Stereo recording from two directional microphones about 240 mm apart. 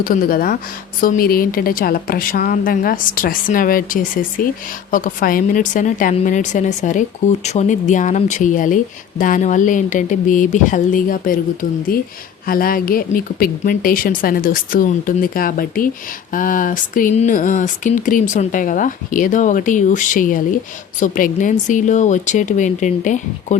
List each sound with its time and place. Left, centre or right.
0.0 s speech: left